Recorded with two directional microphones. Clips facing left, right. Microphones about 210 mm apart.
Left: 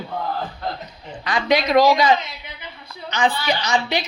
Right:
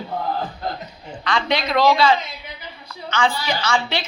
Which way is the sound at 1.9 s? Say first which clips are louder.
Even; 20° left (ahead or behind).